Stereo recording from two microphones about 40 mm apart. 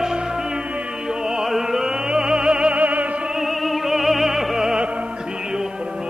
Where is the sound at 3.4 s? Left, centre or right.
Centre.